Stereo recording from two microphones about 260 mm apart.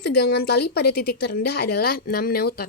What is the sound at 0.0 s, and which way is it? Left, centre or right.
Speech, left.